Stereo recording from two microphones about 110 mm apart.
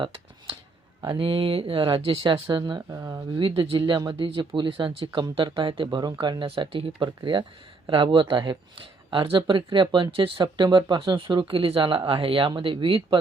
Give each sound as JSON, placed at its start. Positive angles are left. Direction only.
{"t": 1.0, "sound": "speech", "side_deg": -55}
{"t": 2.7, "sound": "speech", "side_deg": -30}
{"t": 3.3, "sound": "speech", "side_deg": -55}